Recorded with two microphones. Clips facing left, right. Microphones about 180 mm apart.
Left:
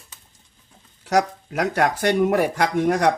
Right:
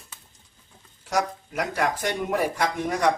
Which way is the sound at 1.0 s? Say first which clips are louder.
Left 6 dB; 70° left (ahead or behind).